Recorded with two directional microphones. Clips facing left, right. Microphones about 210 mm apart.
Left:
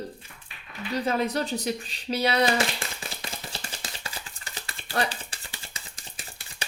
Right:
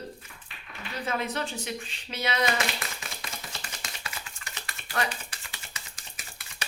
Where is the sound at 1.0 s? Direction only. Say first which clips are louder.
Left 4 dB; 35° left (ahead or behind).